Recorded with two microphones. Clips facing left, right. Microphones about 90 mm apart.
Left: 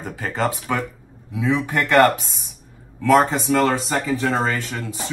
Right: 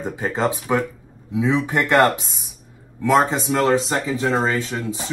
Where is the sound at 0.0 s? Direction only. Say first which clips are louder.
Right 2 dB; 20° right (ahead or behind).